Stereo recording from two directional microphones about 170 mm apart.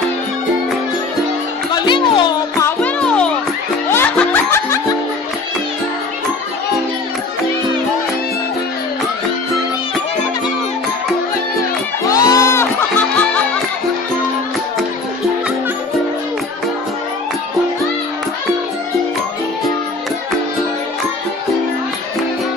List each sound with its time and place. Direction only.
1.7 s music: 25° left (ahead or behind)
2.6 s music: 5° left (ahead or behind)
12.1 s music: 20° left (ahead or behind)